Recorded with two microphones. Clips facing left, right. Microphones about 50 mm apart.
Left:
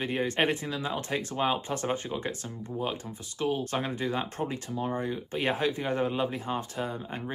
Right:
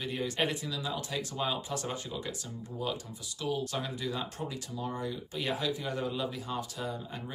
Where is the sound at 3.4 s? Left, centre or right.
Left.